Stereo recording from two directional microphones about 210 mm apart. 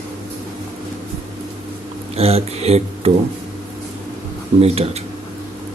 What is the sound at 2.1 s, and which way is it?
Speech, 30° right (ahead or behind).